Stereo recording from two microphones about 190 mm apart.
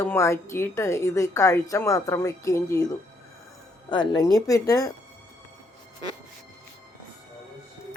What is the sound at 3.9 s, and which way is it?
Speech, 25° left (ahead or behind).